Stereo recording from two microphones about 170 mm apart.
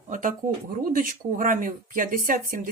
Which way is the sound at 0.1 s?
50° right (ahead or behind).